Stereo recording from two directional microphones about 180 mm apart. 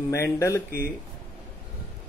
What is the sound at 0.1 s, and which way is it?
Speech, 15° left (ahead or behind).